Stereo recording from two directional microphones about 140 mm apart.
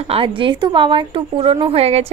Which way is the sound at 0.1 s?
40° right (ahead or behind).